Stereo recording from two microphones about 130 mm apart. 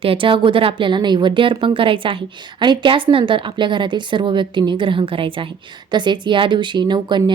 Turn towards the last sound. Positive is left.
turn(degrees=-35)  # may be behind; listen again after turning